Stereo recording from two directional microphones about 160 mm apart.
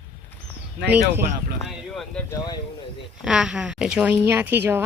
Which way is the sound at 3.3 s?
5° right (ahead or behind).